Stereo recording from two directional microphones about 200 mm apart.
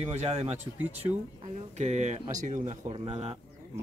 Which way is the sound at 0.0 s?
30° right (ahead or behind).